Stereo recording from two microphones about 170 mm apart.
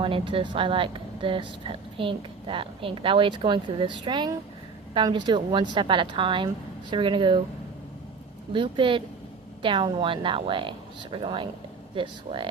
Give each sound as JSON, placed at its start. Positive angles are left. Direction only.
{"t": 0.0, "sound": "a woman's voice", "side_deg": -30}
{"t": 8.5, "sound": "a woman's voice", "side_deg": -30}